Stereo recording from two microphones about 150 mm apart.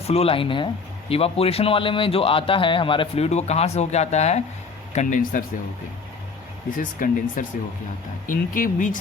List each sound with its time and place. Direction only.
0.1 s speech: 40° left (ahead or behind)
4.9 s speech: 60° left (ahead or behind)
6.7 s speech: 65° left (ahead or behind)